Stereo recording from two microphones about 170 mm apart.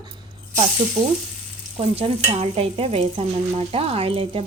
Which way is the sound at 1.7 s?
35° right (ahead or behind).